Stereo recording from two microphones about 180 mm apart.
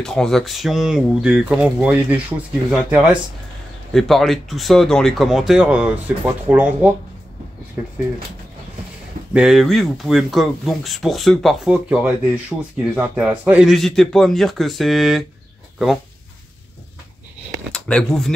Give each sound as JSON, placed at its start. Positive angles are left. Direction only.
{"t": 0.0, "sound": "speech", "side_deg": 5}
{"t": 9.3, "sound": "speech", "side_deg": -5}
{"t": 17.7, "sound": "speech", "side_deg": 5}